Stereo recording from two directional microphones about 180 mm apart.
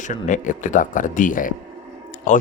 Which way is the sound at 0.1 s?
45° left (ahead or behind).